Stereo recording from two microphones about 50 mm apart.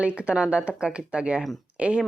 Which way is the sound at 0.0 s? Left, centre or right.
Right.